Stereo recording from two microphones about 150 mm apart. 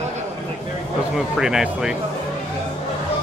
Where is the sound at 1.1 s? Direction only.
5° right (ahead or behind).